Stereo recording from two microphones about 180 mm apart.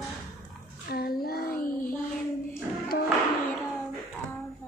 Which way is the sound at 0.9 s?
60° left (ahead or behind).